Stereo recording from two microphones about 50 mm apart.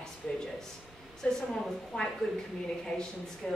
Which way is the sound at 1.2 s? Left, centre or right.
Centre.